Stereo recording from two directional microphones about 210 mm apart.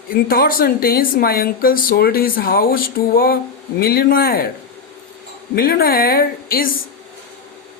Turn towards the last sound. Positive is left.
turn(degrees=45)  # may be behind; listen again after turning